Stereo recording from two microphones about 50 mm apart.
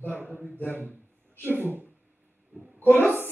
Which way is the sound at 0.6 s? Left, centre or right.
Left.